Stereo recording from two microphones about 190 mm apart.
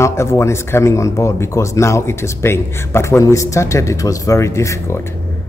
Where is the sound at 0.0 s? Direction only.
15° left (ahead or behind).